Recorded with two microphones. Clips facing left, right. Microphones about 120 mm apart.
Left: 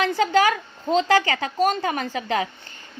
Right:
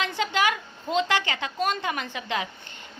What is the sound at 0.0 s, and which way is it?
A woman's voice, 40° left (ahead or behind).